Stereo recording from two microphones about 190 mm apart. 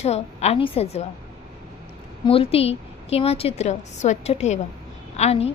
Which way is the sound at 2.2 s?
30° left (ahead or behind).